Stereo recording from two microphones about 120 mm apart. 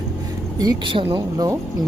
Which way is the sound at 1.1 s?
30° right (ahead or behind).